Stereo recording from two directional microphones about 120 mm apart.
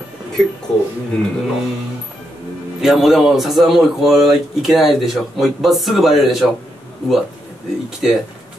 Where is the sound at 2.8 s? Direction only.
Centre (ahead or behind).